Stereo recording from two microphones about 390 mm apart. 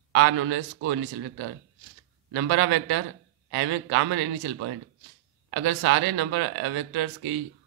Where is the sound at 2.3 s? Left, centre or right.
Right.